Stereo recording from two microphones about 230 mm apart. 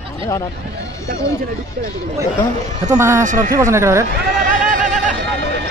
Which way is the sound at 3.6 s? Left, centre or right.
Centre.